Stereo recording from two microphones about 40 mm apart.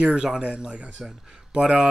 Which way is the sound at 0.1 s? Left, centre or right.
Centre.